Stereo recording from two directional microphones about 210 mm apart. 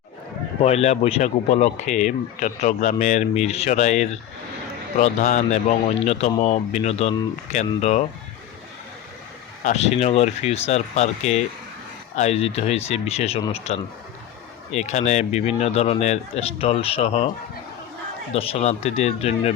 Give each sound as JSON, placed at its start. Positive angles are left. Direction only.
{"t": 0.6, "sound": "speech", "side_deg": 30}
{"t": 9.6, "sound": "speech", "side_deg": 30}
{"t": 18.3, "sound": "speech", "side_deg": 25}